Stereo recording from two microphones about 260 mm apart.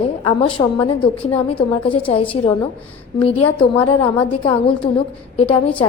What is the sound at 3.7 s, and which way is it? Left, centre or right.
A woman's voice, centre.